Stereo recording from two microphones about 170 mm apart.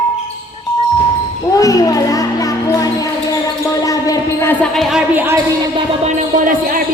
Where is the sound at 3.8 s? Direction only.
20° left (ahead or behind).